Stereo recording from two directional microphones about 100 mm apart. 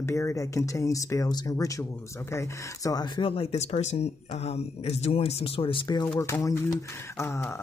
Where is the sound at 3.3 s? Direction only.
80° left; by 6.0 s 60° left (ahead or behind).